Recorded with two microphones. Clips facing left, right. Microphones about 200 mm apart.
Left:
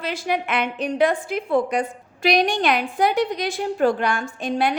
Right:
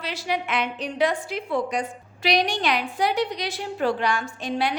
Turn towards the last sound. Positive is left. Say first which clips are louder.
# left 3 dB
turn(degrees=50)  # may be behind; listen again after turning